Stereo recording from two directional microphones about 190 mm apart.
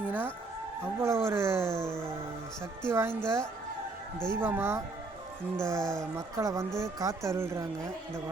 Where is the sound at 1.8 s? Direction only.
5° left (ahead or behind).